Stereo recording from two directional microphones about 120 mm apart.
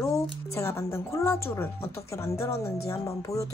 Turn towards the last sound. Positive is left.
turn(degrees=25)  # may be behind; listen again after turning